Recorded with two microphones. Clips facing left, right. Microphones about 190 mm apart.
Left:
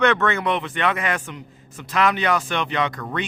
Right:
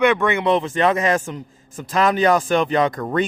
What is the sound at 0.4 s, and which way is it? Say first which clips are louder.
Speech: right 5 dB; 35° right (ahead or behind).